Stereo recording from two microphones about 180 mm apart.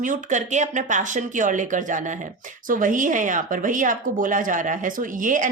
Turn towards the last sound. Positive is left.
turn(degrees=-45)  # may be behind; listen again after turning